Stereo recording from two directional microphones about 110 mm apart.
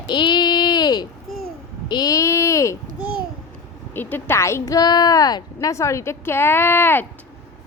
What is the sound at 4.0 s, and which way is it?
Speech, 20° left (ahead or behind).